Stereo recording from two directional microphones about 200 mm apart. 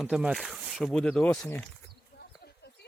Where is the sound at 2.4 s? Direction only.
55° left (ahead or behind).